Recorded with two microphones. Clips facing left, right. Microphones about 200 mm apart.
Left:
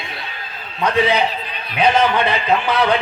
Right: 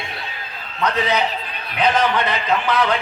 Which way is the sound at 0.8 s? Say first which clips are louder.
Left 3 dB; 15° left (ahead or behind).